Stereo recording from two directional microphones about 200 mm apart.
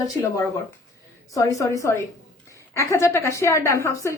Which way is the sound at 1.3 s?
15° left (ahead or behind).